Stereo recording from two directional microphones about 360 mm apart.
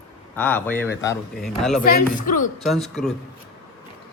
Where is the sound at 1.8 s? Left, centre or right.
Left.